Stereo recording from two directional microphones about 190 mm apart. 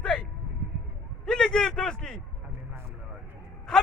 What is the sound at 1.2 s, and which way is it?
A man's voice, 5° left (ahead or behind).